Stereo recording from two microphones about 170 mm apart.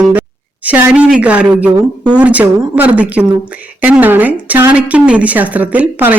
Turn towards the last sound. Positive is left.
turn(degrees=-10)  # may be behind; listen again after turning